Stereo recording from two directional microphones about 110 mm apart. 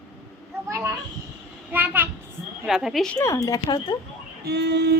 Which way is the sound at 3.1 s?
30° left (ahead or behind).